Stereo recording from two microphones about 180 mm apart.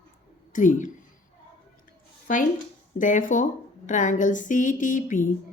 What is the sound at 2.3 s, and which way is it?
A woman's voice, 45° left (ahead or behind).